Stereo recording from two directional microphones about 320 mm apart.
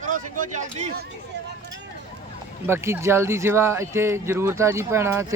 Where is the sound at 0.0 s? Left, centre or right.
Right.